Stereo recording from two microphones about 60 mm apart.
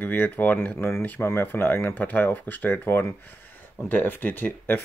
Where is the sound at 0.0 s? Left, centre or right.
Left.